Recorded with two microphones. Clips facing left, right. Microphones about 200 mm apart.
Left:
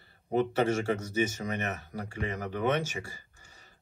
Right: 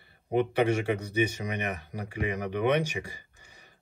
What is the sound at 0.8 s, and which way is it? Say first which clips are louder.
Speech: right 2 dB; 15° right (ahead or behind).